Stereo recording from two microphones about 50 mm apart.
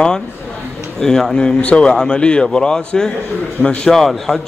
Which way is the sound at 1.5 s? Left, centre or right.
Left.